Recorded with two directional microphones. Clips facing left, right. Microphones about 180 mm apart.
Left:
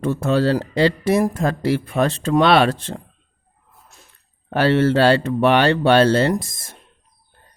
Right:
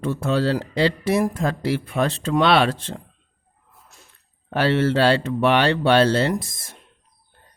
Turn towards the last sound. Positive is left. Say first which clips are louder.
# left 3 dB
turn(degrees=45)  # may be behind; listen again after turning